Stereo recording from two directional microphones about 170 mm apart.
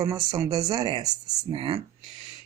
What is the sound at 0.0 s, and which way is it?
Speech, 20° right (ahead or behind).